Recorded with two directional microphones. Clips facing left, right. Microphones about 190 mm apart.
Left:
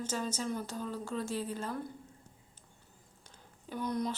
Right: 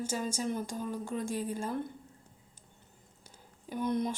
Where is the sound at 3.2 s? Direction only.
15° right (ahead or behind).